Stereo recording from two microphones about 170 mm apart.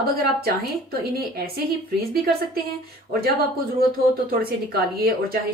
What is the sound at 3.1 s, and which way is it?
A woman's voice, 65° right (ahead or behind).